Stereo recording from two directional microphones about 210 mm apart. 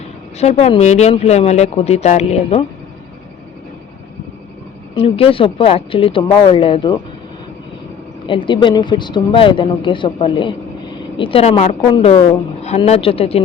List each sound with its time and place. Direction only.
0.3 s speech: 30° left (ahead or behind)
4.9 s speech: 25° left (ahead or behind)
8.3 s speech: 25° left (ahead or behind)